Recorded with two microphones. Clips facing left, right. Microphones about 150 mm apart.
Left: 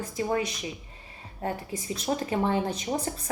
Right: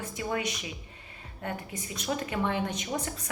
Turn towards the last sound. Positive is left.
turn(degrees=35)  # may be behind; listen again after turning